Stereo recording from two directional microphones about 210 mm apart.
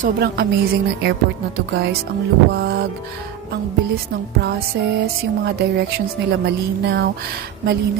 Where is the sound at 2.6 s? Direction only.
55° right (ahead or behind).